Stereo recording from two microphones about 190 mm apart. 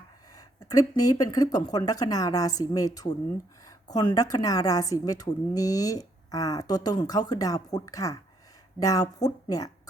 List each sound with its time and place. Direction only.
0.3 s speech: 20° left (ahead or behind)